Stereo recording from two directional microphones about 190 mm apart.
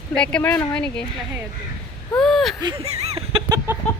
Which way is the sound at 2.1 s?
Centre (ahead or behind).